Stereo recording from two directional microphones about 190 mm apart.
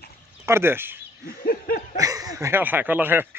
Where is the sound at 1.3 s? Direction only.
50° left (ahead or behind).